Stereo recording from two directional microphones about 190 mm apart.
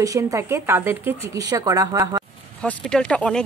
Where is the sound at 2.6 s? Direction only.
5° left (ahead or behind).